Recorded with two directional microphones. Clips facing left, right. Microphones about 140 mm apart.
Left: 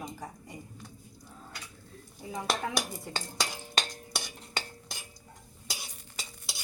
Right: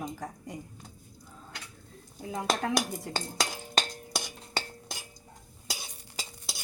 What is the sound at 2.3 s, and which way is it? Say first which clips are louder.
Speech: right 3 dB; 90° right.